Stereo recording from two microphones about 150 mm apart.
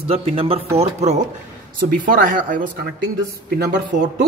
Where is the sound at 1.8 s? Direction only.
70° right (ahead or behind).